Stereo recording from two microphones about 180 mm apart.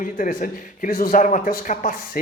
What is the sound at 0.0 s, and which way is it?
A man's voice, 45° left (ahead or behind).